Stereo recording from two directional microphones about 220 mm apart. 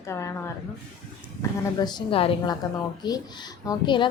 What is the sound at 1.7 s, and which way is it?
A woman's voice, 20° left (ahead or behind).